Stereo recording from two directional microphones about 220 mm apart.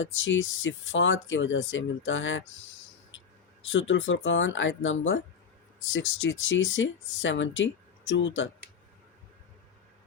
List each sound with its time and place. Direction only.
0.0 s speech: 60° left (ahead or behind)
3.7 s speech: 60° left (ahead or behind)